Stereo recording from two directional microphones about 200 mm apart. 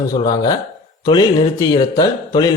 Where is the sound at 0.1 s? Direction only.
20° left (ahead or behind).